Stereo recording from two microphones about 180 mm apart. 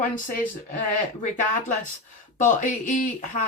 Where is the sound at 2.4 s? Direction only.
45° left (ahead or behind).